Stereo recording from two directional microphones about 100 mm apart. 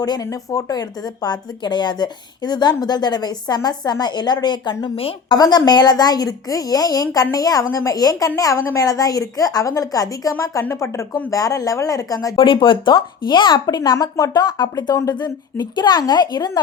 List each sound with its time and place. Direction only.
0.0 s a woman's voice: 40° left (ahead or behind)
12.4 s speech: 55° left (ahead or behind)